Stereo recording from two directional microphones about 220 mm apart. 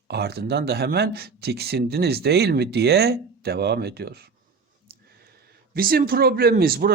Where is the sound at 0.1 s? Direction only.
45° right (ahead or behind).